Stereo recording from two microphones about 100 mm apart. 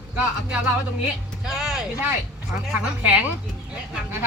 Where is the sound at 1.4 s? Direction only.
5° right (ahead or behind).